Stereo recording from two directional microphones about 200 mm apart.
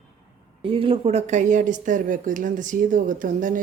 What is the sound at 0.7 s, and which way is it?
Speech, 25° right (ahead or behind).